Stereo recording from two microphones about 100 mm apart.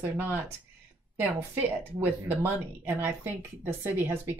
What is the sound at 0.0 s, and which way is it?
Speech, 20° right (ahead or behind).